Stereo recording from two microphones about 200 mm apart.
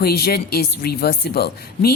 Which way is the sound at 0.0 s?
50° left (ahead or behind).